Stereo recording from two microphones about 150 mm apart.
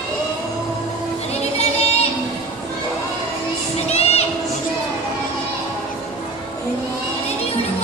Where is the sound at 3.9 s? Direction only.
45° left (ahead or behind).